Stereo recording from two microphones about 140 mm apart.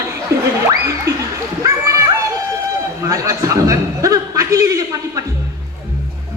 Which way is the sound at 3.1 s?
25° right (ahead or behind).